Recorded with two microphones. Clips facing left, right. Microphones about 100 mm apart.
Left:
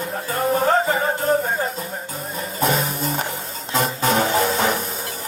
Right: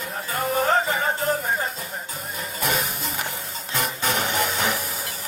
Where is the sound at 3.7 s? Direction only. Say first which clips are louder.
Left 6 dB; 25° left (ahead or behind).